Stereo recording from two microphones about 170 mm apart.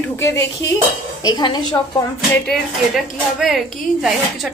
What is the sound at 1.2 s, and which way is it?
Speech, 25° left (ahead or behind).